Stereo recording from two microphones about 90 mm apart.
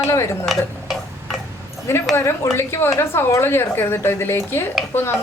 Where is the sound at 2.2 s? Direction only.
30° left (ahead or behind).